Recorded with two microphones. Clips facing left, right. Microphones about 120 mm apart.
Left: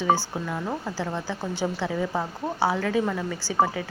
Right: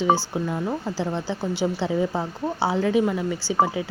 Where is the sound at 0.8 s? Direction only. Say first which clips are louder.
Right 3 dB; 20° right (ahead or behind).